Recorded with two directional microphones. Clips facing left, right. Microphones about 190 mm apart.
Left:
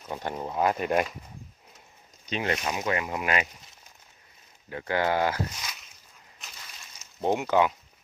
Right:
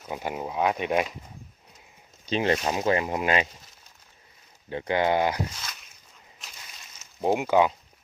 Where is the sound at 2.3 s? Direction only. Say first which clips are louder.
Right 5 dB; 30° right (ahead or behind).